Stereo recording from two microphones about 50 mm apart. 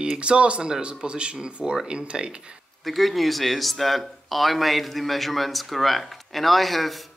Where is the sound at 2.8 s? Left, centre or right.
Centre.